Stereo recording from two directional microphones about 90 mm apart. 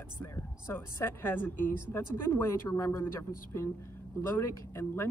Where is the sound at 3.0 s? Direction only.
30° left (ahead or behind).